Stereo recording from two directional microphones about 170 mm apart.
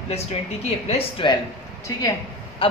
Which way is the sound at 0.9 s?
30° left (ahead or behind).